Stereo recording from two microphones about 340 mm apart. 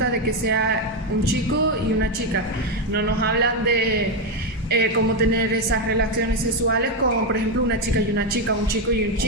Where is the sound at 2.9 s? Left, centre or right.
Right.